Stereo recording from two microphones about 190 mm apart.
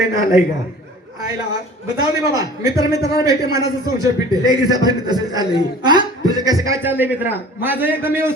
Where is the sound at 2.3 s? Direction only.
20° right (ahead or behind).